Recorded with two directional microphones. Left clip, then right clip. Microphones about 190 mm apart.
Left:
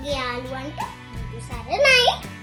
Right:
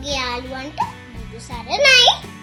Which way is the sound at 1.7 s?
5° right (ahead or behind).